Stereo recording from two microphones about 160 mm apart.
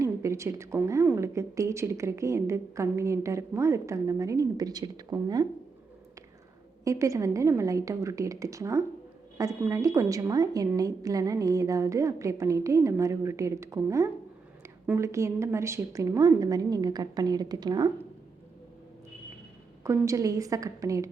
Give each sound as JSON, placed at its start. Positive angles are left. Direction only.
{"t": 0.0, "sound": "a woman's voice", "side_deg": -20}
{"t": 6.8, "sound": "a woman's voice", "side_deg": -20}
{"t": 19.8, "sound": "a woman's voice", "side_deg": -20}